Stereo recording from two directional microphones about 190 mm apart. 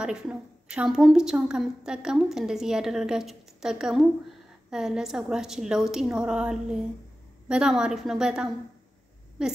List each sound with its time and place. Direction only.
0.0 s a woman's voice: 5° right (ahead or behind)